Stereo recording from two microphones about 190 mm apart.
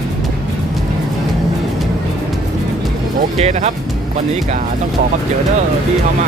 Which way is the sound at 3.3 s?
35° right (ahead or behind).